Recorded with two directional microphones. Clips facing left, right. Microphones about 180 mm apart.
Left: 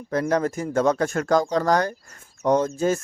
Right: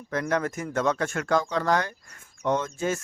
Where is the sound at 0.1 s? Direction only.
35° left (ahead or behind).